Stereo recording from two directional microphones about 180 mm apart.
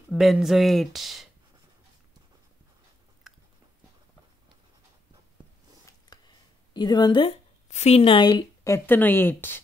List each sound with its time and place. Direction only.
0.1 s speech: centre (ahead or behind)
5.9 s speech: 25° left (ahead or behind)